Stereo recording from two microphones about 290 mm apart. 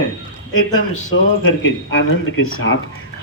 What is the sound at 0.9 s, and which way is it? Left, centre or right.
Speech, left.